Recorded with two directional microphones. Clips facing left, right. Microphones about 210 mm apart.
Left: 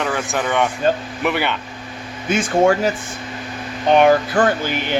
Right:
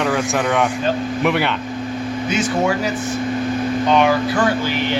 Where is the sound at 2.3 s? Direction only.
50° left (ahead or behind).